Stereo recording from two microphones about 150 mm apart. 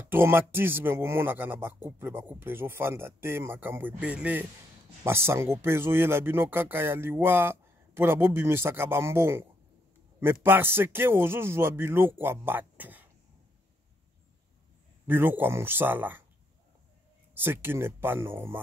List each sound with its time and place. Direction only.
0.1 s speech: 15° right (ahead or behind)
15.0 s speech: 15° right (ahead or behind)
17.3 s speech: 15° right (ahead or behind)